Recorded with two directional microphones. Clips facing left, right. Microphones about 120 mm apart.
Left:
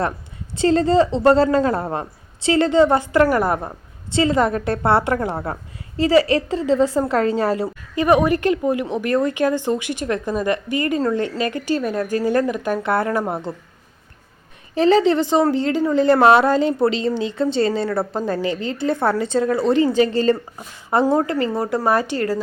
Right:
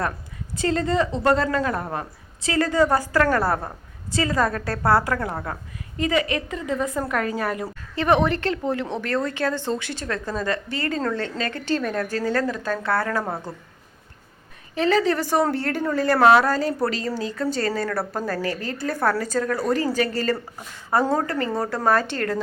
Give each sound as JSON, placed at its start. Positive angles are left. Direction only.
{"t": 0.5, "sound": "a woman's voice", "side_deg": 30}
{"t": 7.9, "sound": "a woman's voice", "side_deg": 10}
{"t": 14.8, "sound": "a woman's voice", "side_deg": 30}